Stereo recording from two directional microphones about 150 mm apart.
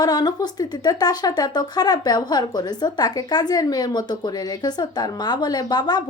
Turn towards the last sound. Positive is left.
turn(degrees=25)  # may be behind; listen again after turning